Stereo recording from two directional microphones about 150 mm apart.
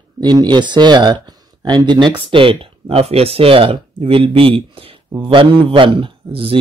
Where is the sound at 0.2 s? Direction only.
30° right (ahead or behind).